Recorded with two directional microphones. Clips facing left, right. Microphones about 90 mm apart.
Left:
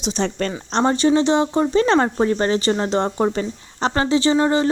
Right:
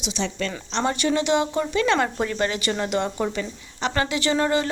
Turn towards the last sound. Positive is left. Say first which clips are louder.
# left 5 dB
turn(degrees=25)  # may be behind; listen again after turning